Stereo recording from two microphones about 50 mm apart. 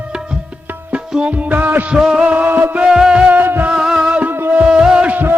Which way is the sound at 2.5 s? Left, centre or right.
Right.